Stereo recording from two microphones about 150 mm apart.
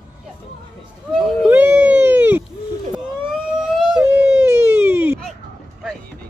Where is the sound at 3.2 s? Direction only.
5° right (ahead or behind).